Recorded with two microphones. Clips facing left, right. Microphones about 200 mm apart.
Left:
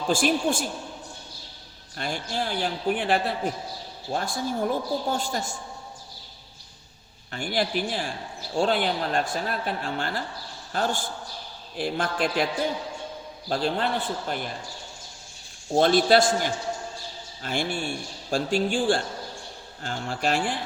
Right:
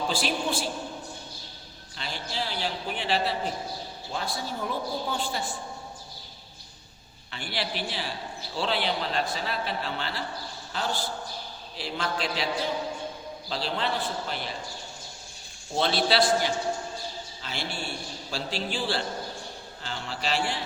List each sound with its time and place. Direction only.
0.1 s a man's voice: 50° left (ahead or behind)
2.0 s a man's voice: 50° left (ahead or behind)
7.3 s a man's voice: 45° left (ahead or behind)
13.5 s a man's voice: 50° left (ahead or behind)
15.7 s a man's voice: 50° left (ahead or behind)